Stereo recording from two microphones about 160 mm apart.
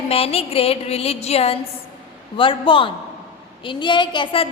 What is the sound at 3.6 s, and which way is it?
Speech, 30° left (ahead or behind).